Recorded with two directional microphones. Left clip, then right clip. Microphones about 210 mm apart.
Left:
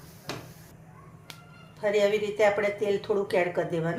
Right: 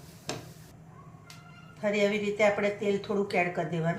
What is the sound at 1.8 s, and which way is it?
A woman's voice, 35° left (ahead or behind).